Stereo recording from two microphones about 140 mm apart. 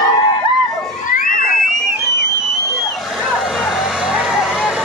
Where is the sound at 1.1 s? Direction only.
75° left (ahead or behind).